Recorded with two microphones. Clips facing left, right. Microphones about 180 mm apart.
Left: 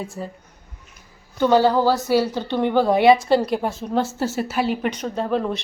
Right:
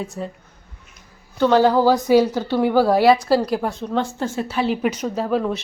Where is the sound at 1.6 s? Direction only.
10° right (ahead or behind).